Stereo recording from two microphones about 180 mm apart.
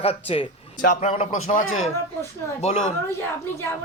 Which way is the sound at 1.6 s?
90° left.